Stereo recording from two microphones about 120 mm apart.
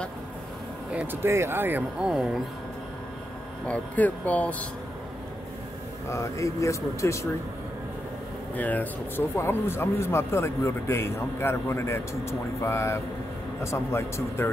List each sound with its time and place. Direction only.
1.2 s speech: 20° right (ahead or behind)
3.6 s speech: 10° left (ahead or behind)
6.0 s speech: 25° left (ahead or behind)
8.5 s speech: 15° left (ahead or behind)